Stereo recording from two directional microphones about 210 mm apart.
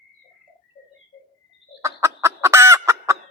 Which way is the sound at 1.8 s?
15° right (ahead or behind).